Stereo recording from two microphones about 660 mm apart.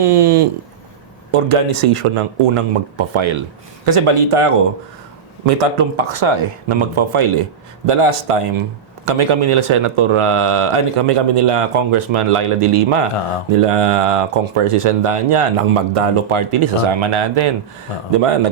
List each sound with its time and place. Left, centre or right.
0.0 s speech: right